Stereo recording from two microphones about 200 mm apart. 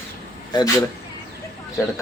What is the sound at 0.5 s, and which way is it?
Speech, 20° left (ahead or behind).